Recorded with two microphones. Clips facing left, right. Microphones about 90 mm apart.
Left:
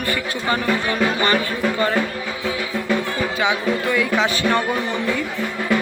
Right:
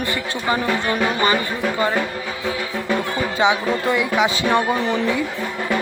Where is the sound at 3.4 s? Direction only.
20° right (ahead or behind).